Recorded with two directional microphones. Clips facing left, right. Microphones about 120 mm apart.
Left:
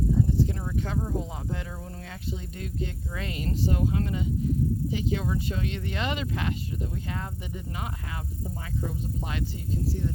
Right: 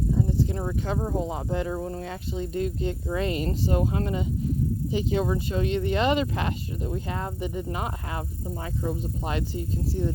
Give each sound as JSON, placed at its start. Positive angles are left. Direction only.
{"t": 0.9, "sound": "speech", "side_deg": -35}